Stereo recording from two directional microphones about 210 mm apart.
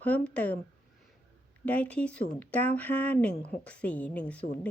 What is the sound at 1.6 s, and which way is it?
A woman's voice, 5° left (ahead or behind).